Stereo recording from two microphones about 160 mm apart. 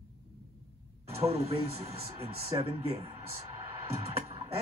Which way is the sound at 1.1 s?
40° right (ahead or behind).